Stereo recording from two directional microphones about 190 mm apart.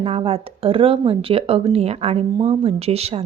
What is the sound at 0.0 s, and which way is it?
A woman's voice, 30° right (ahead or behind).